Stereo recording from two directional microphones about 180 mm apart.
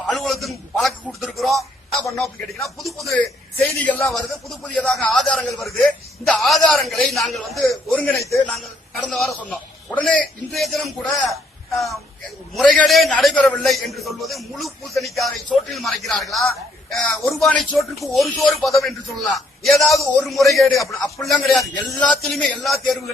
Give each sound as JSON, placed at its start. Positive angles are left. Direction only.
{"t": 0.1, "sound": "a sound", "side_deg": 0}
{"t": 2.1, "sound": "speech", "side_deg": 0}
{"t": 8.3, "sound": "a man's voice", "side_deg": 15}
{"t": 8.5, "sound": "a man's voice", "side_deg": 0}